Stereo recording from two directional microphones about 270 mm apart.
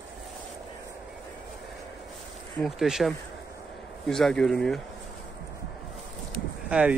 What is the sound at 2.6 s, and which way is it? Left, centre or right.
Speech, centre.